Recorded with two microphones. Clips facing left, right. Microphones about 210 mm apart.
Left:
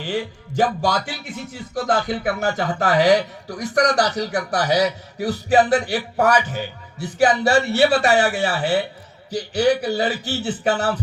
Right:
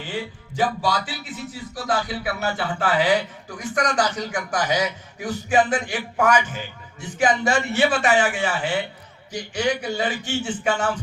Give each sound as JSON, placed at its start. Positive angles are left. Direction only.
{"t": 0.1, "sound": "a man's voice", "side_deg": 45}